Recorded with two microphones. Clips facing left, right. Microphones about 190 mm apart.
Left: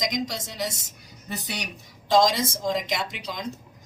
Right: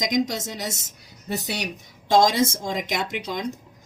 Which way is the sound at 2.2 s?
50° right (ahead or behind).